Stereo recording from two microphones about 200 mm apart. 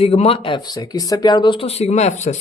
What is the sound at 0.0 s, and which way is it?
Speech, 30° left (ahead or behind).